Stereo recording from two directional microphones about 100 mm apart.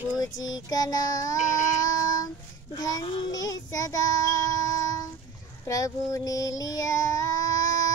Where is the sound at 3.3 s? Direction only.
35° left (ahead or behind).